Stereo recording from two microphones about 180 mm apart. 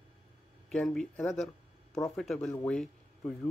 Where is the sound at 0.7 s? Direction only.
5° left (ahead or behind).